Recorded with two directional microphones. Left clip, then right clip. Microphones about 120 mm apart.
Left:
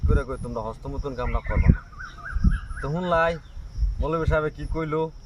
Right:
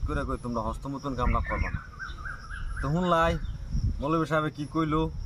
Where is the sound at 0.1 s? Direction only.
25° left (ahead or behind).